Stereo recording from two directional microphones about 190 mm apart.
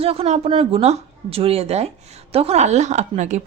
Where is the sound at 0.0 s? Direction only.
30° right (ahead or behind).